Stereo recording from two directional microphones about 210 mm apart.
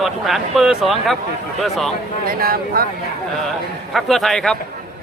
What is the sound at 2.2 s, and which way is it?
Speech, 45° right (ahead or behind).